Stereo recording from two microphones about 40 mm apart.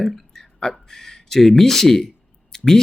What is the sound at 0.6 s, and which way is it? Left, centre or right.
Speech, centre.